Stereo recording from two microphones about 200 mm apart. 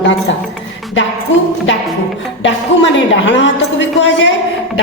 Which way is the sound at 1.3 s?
65° left (ahead or behind).